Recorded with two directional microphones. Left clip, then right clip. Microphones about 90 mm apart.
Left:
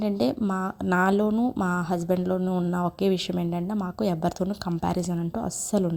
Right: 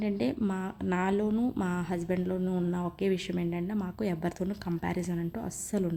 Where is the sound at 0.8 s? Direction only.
65° left (ahead or behind).